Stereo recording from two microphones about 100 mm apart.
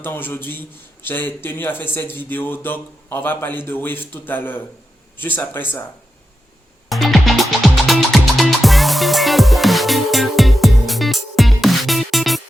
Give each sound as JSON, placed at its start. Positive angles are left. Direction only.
{"t": 0.0, "sound": "a man's voice", "side_deg": 20}
{"t": 6.8, "sound": "music", "side_deg": 0}